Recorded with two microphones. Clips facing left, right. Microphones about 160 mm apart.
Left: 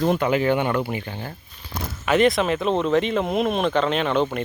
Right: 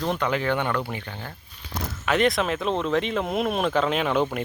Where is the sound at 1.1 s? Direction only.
25° left (ahead or behind).